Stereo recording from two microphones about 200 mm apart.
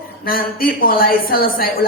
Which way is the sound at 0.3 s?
45° left (ahead or behind).